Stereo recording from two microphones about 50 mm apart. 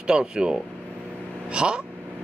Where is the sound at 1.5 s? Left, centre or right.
Centre.